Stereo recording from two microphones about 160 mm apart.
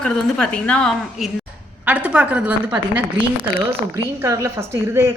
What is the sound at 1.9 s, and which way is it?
A woman's voice, 5° right (ahead or behind).